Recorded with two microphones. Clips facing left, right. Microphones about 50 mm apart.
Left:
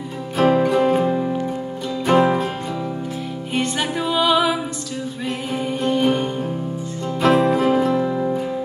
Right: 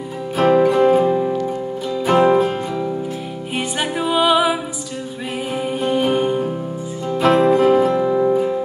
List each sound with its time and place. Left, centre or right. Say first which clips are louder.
0.4 s music: right 3 dB; centre
3.5 s music: even; centre
5.7 s music: even; centre